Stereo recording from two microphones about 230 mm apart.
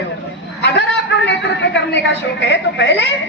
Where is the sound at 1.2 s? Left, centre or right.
Left.